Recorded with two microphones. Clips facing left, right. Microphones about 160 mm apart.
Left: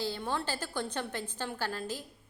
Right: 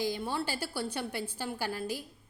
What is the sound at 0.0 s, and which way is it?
A woman's voice, 10° right (ahead or behind).